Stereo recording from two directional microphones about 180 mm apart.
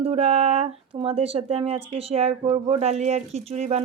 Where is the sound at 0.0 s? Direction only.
35° right (ahead or behind).